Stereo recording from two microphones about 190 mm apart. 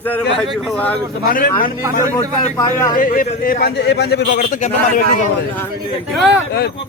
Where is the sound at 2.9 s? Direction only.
45° left (ahead or behind); by 4.4 s 65° left (ahead or behind).